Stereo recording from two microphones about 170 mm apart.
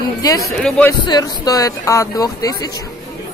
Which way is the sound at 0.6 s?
5° left (ahead or behind).